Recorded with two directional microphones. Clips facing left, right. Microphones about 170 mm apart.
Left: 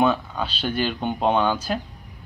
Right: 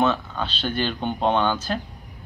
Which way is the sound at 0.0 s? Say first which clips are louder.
Left 1 dB; 10° left (ahead or behind).